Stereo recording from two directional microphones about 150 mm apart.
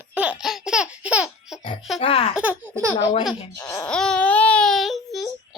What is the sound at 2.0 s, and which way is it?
Speech, 40° left (ahead or behind).